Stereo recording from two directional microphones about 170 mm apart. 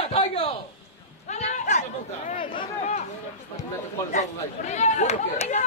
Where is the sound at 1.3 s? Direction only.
40° left (ahead or behind).